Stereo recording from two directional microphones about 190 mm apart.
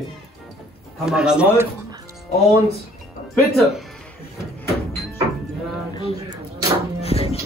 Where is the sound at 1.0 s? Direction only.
5° right (ahead or behind).